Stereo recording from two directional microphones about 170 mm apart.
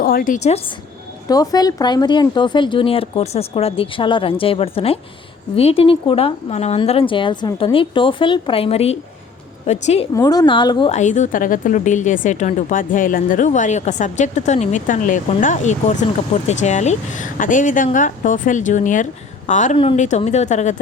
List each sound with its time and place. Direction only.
0.0 s a sound: 60° left (ahead or behind)
0.3 s a woman's voice: 40° left (ahead or behind)
1.3 s a woman's voice: 20° left (ahead or behind); by 10.1 s 40° left (ahead or behind)
10.2 s a woman's voice: 20° left (ahead or behind)
10.9 s a woman's voice: 45° left (ahead or behind)
19.7 s a woman's voice: 30° left (ahead or behind)